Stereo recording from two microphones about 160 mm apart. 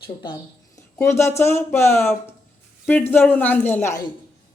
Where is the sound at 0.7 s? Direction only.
15° left (ahead or behind).